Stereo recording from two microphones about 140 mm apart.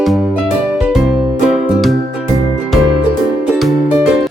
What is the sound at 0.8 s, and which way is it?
Music, 5° right (ahead or behind).